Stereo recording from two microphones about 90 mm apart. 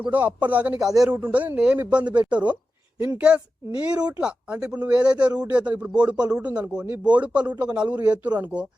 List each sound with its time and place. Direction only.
0.0 s a man's voice: 15° right (ahead or behind)